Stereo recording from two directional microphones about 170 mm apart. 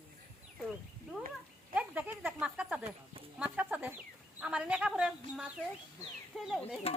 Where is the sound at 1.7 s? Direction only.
10° right (ahead or behind).